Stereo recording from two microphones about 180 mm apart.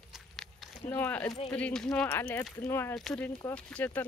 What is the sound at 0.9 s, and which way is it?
Speech, 10° left (ahead or behind).